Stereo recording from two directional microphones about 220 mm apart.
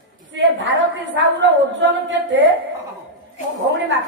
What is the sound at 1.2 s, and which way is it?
A woman's voice, 55° right (ahead or behind).